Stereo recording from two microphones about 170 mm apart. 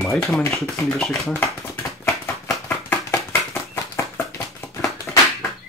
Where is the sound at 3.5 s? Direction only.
20° left (ahead or behind).